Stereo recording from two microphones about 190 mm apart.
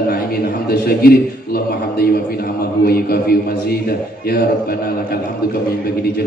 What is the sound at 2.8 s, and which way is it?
Speech, 55° left (ahead or behind).